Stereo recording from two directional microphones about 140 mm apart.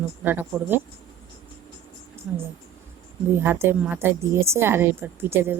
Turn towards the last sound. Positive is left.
turn(degrees=-15)  # may be behind; listen again after turning